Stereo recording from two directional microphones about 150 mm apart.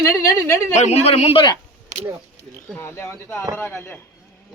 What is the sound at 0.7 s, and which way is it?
Speech, 50° left (ahead or behind).